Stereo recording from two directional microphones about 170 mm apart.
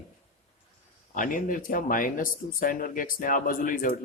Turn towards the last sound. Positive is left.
turn(degrees=55)  # may be behind; listen again after turning